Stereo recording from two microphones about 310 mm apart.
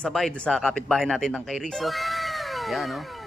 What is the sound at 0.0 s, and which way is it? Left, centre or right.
A man's voice, centre.